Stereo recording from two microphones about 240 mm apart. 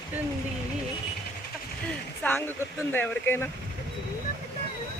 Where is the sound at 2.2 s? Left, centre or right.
Centre.